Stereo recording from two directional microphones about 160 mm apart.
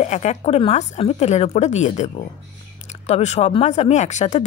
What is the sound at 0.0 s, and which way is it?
Speech, 45° left (ahead or behind).